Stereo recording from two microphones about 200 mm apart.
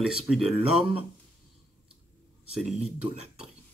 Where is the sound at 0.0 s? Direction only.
Centre (ahead or behind).